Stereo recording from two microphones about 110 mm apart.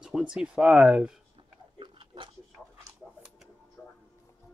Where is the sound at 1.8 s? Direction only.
50° right (ahead or behind).